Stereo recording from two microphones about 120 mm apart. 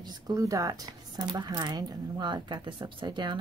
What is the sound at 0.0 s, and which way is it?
Speech, 35° right (ahead or behind).